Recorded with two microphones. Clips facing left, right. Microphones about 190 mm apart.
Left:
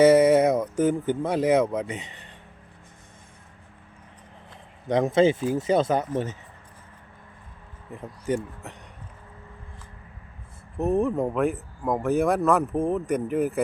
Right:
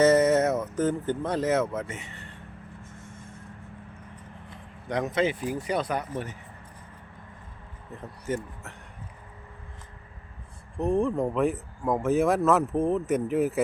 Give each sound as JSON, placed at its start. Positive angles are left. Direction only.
{"t": 0.0, "sound": "speech", "side_deg": 10}
{"t": 4.9, "sound": "speech", "side_deg": 25}
{"t": 8.3, "sound": "speech", "side_deg": 15}
{"t": 10.8, "sound": "speech", "side_deg": 5}